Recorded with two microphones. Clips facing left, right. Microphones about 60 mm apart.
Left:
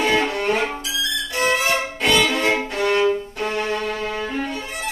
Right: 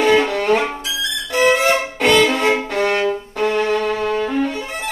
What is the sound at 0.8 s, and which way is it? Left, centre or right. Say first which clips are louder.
Music: right 1 dB; right.